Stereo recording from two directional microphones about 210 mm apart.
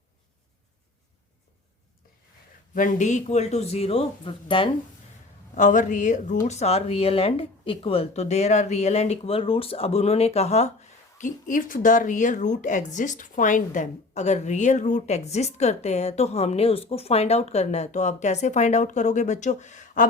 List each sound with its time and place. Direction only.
2.7 s a woman's voice: 40° left (ahead or behind); by 4.7 s 25° left (ahead or behind)
5.5 s a woman's voice: 35° left (ahead or behind)